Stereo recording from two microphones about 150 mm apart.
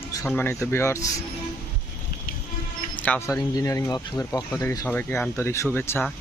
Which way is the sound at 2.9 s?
10° left (ahead or behind).